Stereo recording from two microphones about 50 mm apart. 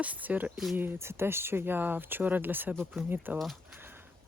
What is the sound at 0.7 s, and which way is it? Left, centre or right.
Speech, right.